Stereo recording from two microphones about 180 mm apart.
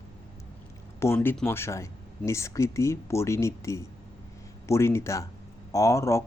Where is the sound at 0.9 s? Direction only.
15° left (ahead or behind).